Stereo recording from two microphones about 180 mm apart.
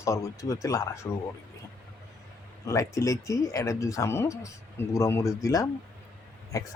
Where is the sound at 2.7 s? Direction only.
20° left (ahead or behind).